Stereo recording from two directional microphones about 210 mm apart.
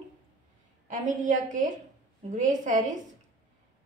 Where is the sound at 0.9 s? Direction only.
35° right (ahead or behind).